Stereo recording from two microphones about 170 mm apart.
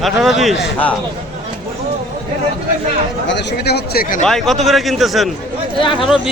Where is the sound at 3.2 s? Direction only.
90° left; by 4.3 s 55° left (ahead or behind).